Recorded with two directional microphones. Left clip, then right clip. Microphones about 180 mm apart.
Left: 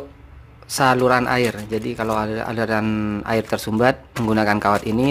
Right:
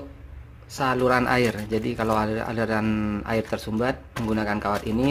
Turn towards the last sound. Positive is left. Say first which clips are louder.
# left 7 dB
turn(degrees=20)  # may be behind; listen again after turning